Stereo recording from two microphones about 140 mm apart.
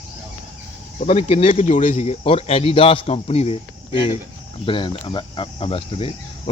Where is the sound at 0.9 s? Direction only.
55° left (ahead or behind).